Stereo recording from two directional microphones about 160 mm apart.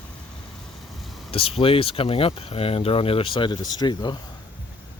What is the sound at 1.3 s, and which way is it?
Speech, 35° left (ahead or behind).